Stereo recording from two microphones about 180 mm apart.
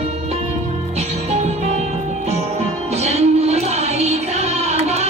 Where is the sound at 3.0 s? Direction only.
35° right (ahead or behind).